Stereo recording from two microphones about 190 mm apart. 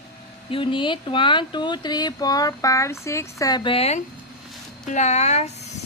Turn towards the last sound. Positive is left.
turn(degrees=35)  # may be behind; listen again after turning